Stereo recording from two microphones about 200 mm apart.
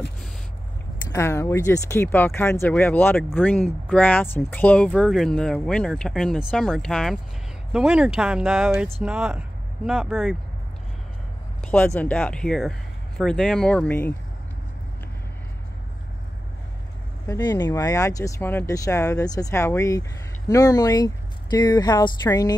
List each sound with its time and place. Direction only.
1.1 s speech: 15° left (ahead or behind)
11.6 s speech: 5° left (ahead or behind)
17.3 s speech: 20° left (ahead or behind)